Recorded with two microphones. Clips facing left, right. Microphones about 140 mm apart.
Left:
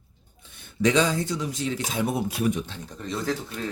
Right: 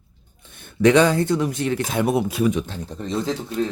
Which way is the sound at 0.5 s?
55° right (ahead or behind).